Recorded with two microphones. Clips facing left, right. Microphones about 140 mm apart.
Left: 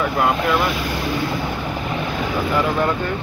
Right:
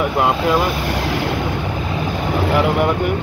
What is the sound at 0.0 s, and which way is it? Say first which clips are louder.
Speech: right 2 dB; 25° right (ahead or behind).